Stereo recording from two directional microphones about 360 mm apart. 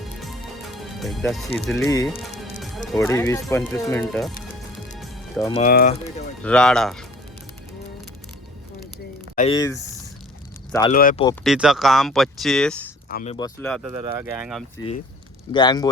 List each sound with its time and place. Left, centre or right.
0.8 s speech: centre
4.9 s music: centre
5.5 s speech: left
6.4 s speech: centre
9.3 s speech: centre
10.9 s speech: left
11.4 s speech: centre
13.1 s speech: left
13.3 s speech: centre
15.5 s speech: centre